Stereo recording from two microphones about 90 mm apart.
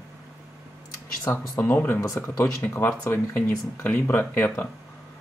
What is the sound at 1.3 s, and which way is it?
Speech, 35° left (ahead or behind).